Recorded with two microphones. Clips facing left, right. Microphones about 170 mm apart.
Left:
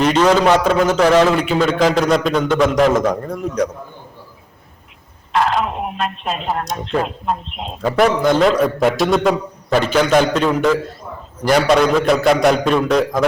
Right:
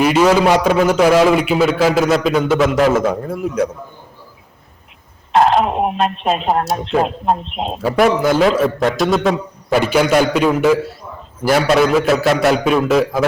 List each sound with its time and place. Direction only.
0.0 s a man's voice: 10° right (ahead or behind)
5.3 s speech: 45° right (ahead or behind)
7.8 s a man's voice: 5° right (ahead or behind)